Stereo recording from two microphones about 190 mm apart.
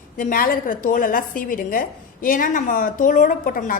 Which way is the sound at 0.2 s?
50° left (ahead or behind).